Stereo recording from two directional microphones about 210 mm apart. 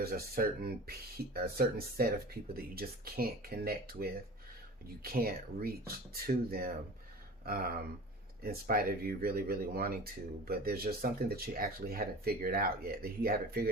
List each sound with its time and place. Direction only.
0.0 s speech: 45° right (ahead or behind)